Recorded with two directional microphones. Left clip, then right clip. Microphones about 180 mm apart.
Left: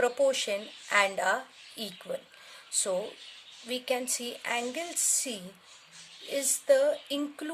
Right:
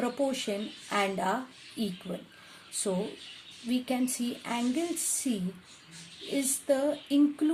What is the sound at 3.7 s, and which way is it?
Speech, 35° left (ahead or behind).